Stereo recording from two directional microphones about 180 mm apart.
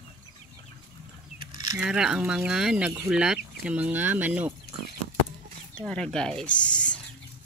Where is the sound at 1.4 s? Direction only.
25° right (ahead or behind).